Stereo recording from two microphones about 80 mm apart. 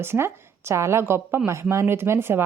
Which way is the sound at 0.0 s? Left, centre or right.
Right.